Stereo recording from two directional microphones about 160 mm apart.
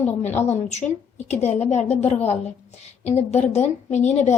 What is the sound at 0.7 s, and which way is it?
A woman's voice, 45° left (ahead or behind).